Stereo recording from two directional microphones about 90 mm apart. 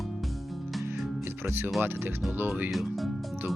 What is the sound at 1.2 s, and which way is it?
Music, 25° right (ahead or behind).